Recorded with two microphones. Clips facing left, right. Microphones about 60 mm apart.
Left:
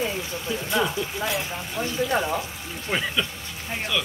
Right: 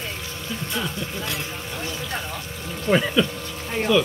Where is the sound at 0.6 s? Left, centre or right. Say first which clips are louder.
Left 5 dB; centre.